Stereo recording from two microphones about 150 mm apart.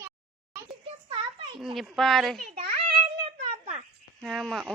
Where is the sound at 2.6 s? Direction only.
65° right (ahead or behind).